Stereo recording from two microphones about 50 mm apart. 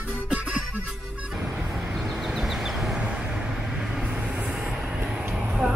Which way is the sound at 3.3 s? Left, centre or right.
Centre.